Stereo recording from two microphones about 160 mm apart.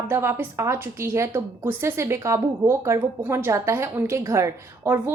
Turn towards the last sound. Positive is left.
turn(degrees=-15)  # may be behind; listen again after turning